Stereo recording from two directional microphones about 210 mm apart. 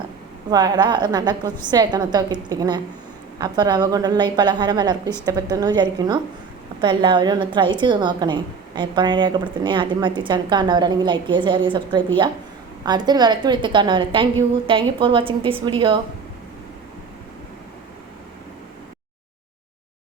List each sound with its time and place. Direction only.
0.5 s a woman's voice: 20° right (ahead or behind)